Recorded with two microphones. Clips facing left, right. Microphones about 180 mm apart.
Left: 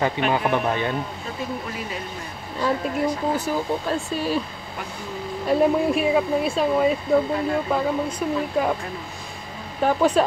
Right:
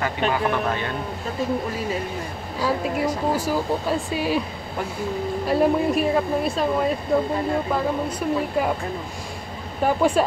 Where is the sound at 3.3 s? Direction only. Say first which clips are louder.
Right 1 dB; 10° right (ahead or behind).